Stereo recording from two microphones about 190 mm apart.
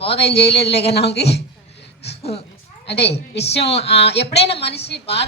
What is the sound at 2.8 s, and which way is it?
Speech, 60° left (ahead or behind).